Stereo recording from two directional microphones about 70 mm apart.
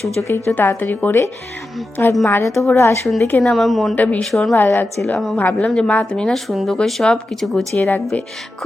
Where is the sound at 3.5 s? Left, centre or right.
Centre.